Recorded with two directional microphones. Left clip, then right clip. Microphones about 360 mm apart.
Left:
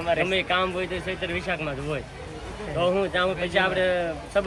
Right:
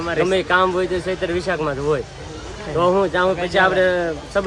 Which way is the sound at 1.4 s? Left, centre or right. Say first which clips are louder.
Right 7 dB; centre.